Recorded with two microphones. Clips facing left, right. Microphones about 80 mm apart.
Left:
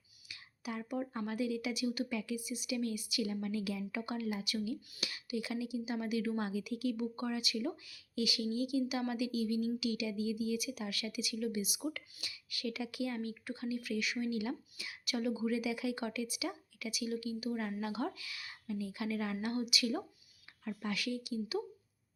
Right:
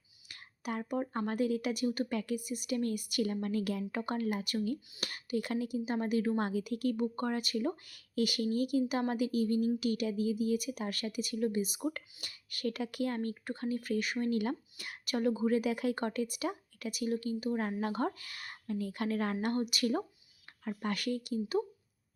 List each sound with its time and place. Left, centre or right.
0.3 s speech: right